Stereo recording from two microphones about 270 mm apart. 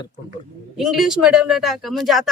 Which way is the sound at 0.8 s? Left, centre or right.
Centre.